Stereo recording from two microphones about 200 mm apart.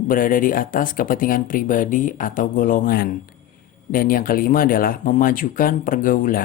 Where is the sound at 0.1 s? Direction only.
45° left (ahead or behind).